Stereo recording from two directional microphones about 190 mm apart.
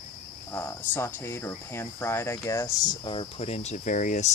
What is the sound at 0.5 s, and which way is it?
Speech, 10° left (ahead or behind).